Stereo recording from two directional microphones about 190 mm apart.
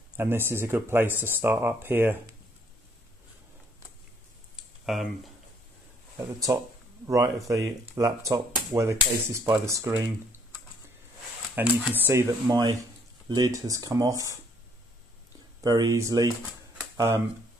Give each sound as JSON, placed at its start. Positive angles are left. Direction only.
{"t": 0.2, "sound": "speech", "side_deg": -10}
{"t": 4.6, "sound": "a sound", "side_deg": 0}
{"t": 6.1, "sound": "speech", "side_deg": -15}
{"t": 11.6, "sound": "speech", "side_deg": -10}
{"t": 15.6, "sound": "speech", "side_deg": -20}